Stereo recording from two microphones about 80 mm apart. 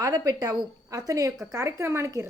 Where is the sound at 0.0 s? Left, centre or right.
Right.